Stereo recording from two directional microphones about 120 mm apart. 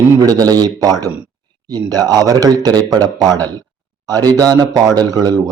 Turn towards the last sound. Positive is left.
turn(degrees=-30)  # may be behind; listen again after turning